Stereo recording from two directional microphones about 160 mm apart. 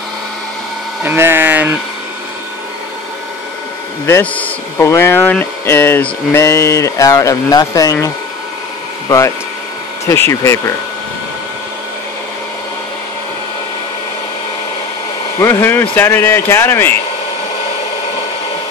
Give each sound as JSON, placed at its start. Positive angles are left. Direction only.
{"t": 1.0, "sound": "speech", "side_deg": -15}
{"t": 4.0, "sound": "speech", "side_deg": 10}
{"t": 10.0, "sound": "speech", "side_deg": 15}
{"t": 15.3, "sound": "speech", "side_deg": 15}